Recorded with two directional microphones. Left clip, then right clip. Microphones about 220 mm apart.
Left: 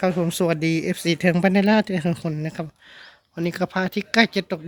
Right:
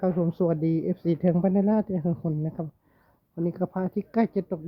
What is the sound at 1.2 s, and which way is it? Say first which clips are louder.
Speech: left 6 dB; 20° left (ahead or behind).